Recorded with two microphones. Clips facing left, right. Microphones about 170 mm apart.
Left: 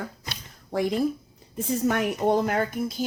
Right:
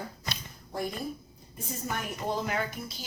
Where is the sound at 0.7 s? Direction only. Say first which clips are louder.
Left 10 dB; 90° left.